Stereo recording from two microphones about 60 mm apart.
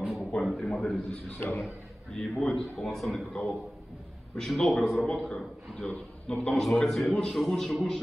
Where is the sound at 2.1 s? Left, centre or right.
Centre.